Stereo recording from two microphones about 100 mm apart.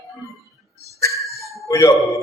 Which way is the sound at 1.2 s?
Centre (ahead or behind).